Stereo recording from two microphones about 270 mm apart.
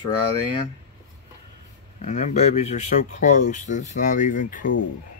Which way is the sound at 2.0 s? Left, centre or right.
Left.